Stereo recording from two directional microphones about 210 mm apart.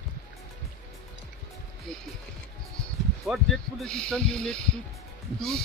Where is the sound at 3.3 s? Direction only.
Centre (ahead or behind).